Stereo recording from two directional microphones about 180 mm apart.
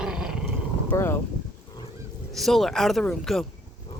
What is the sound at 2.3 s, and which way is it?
Speech, centre (ahead or behind).